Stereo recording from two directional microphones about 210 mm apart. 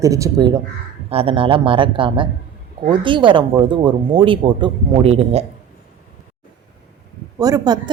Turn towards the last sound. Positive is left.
turn(degrees=-20)  # may be behind; listen again after turning